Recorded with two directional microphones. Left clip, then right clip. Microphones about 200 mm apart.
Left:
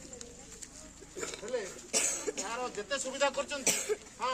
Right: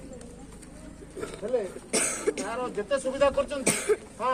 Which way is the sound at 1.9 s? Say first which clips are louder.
Right 5 dB; 55° right (ahead or behind).